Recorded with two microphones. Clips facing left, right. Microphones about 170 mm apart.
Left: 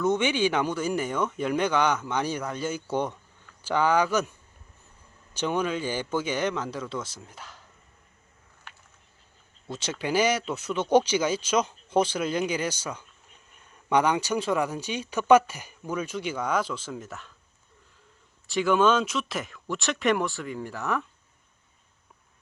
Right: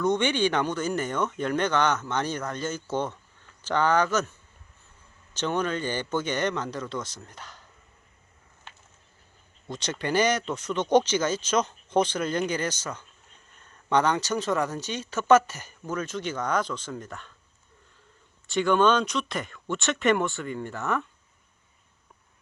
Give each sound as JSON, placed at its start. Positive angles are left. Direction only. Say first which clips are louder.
{"t": 0.0, "sound": "speech", "louder": "even", "side_deg": 5}
{"t": 8.7, "sound": "a sound", "louder": "right 1 dB", "side_deg": -20}
{"t": 9.6, "sound": "speech", "louder": "even", "side_deg": 5}
{"t": 18.4, "sound": "speech", "louder": "even", "side_deg": 0}